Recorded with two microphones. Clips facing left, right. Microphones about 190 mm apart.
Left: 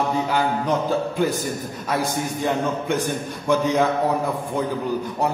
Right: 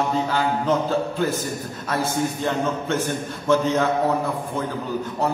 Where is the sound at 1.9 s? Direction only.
15° left (ahead or behind).